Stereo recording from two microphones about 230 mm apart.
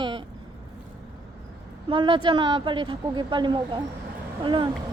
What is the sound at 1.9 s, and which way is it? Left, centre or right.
A woman's voice, right.